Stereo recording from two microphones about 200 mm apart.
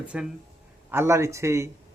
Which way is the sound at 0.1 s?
5° right (ahead or behind).